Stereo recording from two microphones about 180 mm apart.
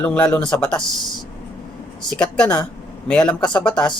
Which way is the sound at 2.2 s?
5° left (ahead or behind).